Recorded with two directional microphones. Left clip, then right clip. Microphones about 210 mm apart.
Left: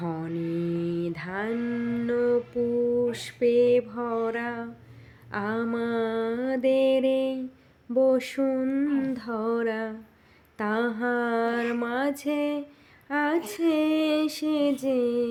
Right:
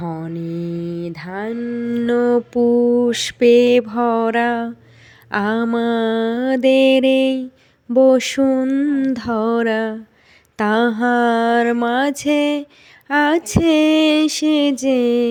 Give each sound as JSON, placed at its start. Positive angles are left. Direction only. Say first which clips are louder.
{"t": 0.0, "sound": "mantra", "louder": "right 5 dB", "side_deg": -25}
{"t": 5.3, "sound": "music", "louder": "right 10 dB", "side_deg": -40}